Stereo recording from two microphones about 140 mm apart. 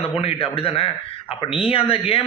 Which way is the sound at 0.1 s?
45° left (ahead or behind).